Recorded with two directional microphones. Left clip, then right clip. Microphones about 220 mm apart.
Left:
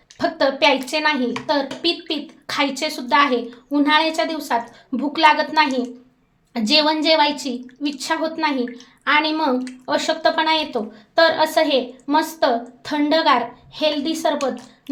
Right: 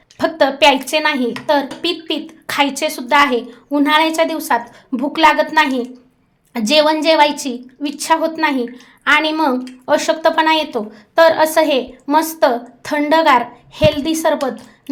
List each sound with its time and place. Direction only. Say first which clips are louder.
0.2 s a woman's voice: right 5 dB; 30° right (ahead or behind)